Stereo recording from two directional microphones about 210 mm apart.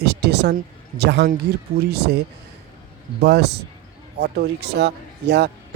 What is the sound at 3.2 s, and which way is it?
A man's voice, 50° right (ahead or behind).